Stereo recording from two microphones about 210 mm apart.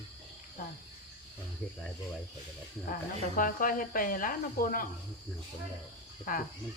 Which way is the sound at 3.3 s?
40° left (ahead or behind).